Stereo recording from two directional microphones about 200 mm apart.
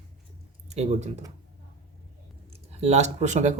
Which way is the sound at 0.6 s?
35° right (ahead or behind).